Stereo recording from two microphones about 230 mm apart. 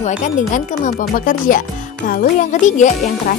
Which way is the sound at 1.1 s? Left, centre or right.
Left.